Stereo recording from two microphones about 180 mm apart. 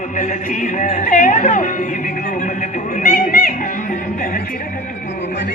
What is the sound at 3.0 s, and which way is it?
Music, 50° left (ahead or behind).